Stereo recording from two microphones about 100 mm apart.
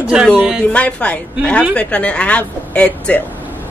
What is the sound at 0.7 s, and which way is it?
A woman's voice, 10° left (ahead or behind).